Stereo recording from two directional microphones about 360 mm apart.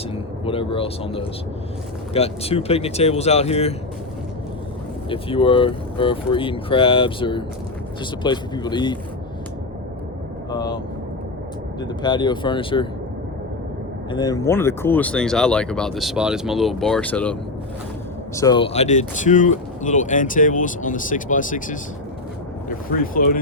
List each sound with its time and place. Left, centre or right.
0.1 s speech: centre
5.0 s speech: centre
10.5 s speech: centre
11.8 s speech: centre
14.1 s speech: centre
18.3 s speech: centre
23.0 s speech: left